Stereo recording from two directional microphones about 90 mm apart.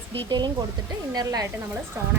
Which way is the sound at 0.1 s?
60° right (ahead or behind).